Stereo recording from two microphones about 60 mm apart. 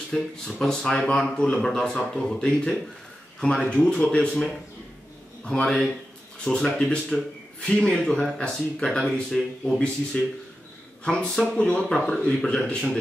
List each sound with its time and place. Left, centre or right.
0.1 s speech: centre